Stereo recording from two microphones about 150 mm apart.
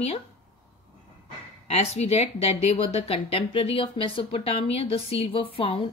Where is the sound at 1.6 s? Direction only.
45° left (ahead or behind).